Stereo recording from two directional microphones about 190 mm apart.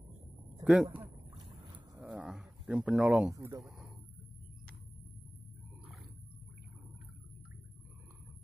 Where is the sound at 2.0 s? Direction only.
5° right (ahead or behind).